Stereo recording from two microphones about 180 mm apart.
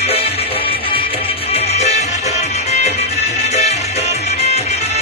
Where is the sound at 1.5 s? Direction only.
40° left (ahead or behind).